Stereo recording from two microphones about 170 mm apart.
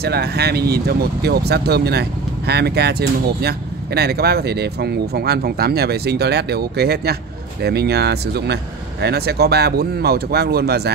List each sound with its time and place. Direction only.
0.0 s speech: 70° right (ahead or behind)